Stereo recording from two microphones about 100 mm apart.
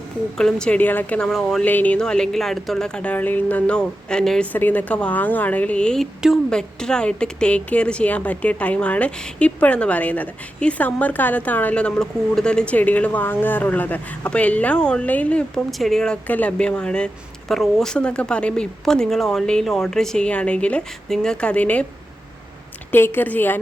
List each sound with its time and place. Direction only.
0.3 s speech: 5° left (ahead or behind)
1.2 s speech: centre (ahead or behind)
1.6 s speech: 15° left (ahead or behind)
4.5 s speech: 20° left (ahead or behind)
16.2 s speech: 15° left (ahead or behind)
22.9 s a woman's voice: 20° left (ahead or behind)